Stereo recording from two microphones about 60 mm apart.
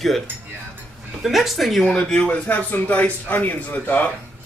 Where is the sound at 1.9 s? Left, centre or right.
Centre.